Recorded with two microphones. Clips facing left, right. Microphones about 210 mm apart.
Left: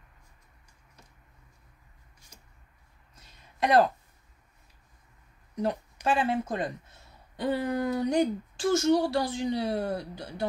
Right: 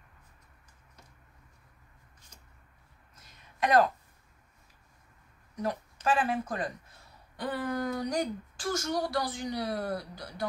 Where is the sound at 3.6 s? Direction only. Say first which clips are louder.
Left 2 dB; 30° left (ahead or behind).